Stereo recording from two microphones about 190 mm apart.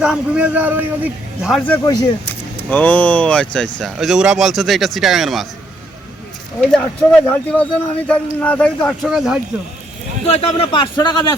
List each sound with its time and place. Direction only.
0.0 s a man's voice: 5° right (ahead or behind)
1.8 s a man's voice: 20° left (ahead or behind)
2.6 s speech: 10° left (ahead or behind)
6.6 s speech: 5° left (ahead or behind)
10.2 s a man's voice: 30° left (ahead or behind)